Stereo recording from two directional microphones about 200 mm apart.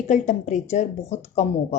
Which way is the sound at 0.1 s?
40° left (ahead or behind).